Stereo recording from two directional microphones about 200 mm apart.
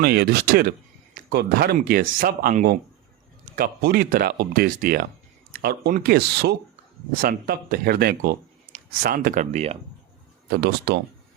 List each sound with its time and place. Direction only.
0.0 s speech: 50° right (ahead or behind); by 9.7 s 35° right (ahead or behind)
10.6 s speech: 55° right (ahead or behind)